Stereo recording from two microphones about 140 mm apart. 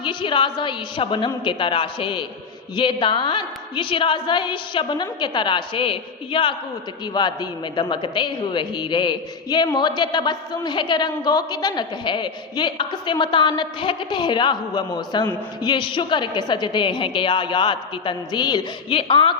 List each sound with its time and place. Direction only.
0.0 s a man's voice: 35° left (ahead or behind)